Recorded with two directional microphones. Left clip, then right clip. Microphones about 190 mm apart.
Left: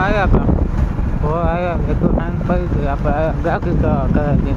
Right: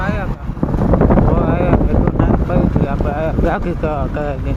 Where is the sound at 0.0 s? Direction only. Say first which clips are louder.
Left 6 dB; 45° left (ahead or behind).